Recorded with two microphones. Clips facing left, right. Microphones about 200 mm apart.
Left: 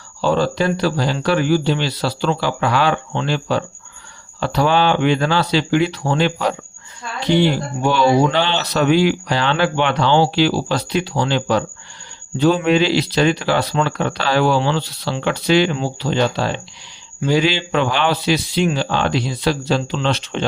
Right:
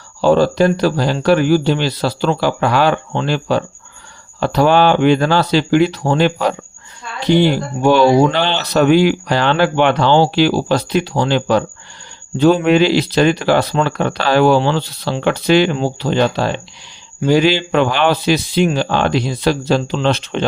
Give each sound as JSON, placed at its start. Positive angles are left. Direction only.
{"t": 0.2, "sound": "speech", "side_deg": -45}
{"t": 7.8, "sound": "speech", "side_deg": -45}